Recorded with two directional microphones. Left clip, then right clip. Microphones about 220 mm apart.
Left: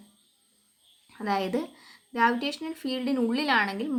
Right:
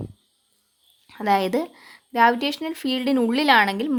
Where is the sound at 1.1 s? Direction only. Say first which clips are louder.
Right 8 dB; 40° right (ahead or behind).